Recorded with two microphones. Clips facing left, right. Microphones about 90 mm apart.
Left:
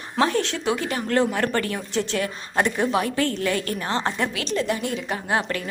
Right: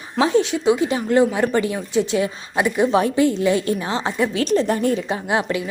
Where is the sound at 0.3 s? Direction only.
15° right (ahead or behind).